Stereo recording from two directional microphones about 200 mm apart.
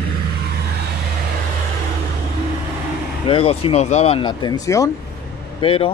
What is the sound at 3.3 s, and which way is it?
Speech, 25° left (ahead or behind).